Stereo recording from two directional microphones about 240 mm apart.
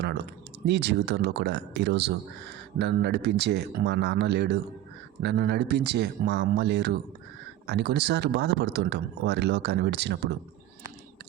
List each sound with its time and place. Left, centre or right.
0.6 s a man's voice: right